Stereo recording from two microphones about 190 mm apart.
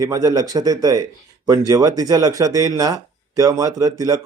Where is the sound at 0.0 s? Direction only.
20° right (ahead or behind).